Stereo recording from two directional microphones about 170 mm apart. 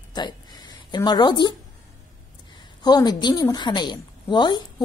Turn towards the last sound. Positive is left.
turn(degrees=25)  # may be behind; listen again after turning